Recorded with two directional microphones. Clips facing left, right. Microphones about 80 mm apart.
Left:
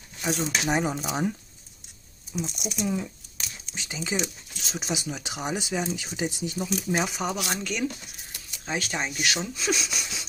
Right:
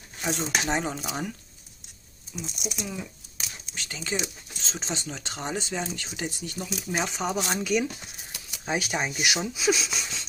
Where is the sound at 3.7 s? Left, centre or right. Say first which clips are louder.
Left 2 dB; centre.